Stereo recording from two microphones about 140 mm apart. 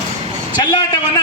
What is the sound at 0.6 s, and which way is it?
Speech, 30° left (ahead or behind).